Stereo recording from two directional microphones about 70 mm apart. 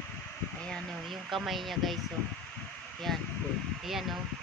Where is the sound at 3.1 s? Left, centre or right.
Centre.